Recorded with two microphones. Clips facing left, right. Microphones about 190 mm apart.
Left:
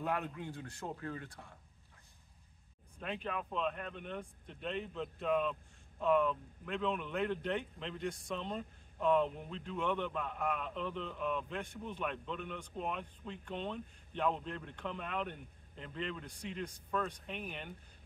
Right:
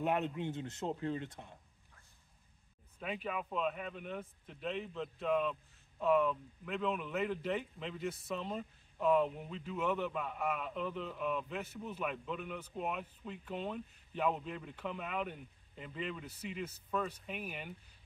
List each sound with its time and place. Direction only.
0.0 s speech: 20° right (ahead or behind)
3.0 s speech: 5° right (ahead or behind)